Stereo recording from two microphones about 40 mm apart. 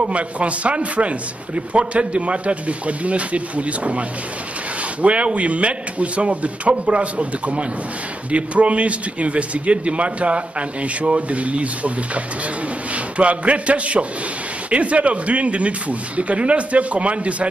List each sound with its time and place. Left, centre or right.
0.0 s a man's voice: right
5.0 s a man's voice: right